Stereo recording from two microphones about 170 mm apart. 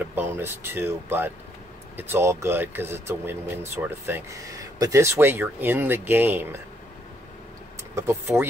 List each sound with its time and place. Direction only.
0.1 s speech: 10° right (ahead or behind)
7.9 s speech: 15° right (ahead or behind)